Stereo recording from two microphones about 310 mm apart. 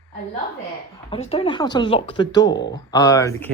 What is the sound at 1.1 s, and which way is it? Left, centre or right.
Speech, centre.